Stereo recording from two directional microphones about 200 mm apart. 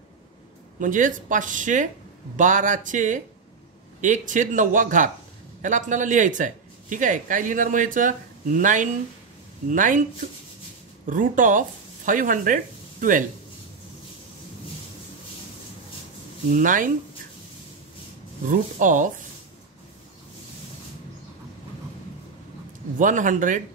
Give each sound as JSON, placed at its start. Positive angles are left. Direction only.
{"t": 0.7, "sound": "speech", "side_deg": -40}
{"t": 11.1, "sound": "speech", "side_deg": -40}
{"t": 16.4, "sound": "speech", "side_deg": -40}
{"t": 18.4, "sound": "speech", "side_deg": -40}
{"t": 22.9, "sound": "speech", "side_deg": -40}